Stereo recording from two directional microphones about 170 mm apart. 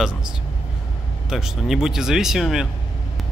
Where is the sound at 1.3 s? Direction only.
5° right (ahead or behind).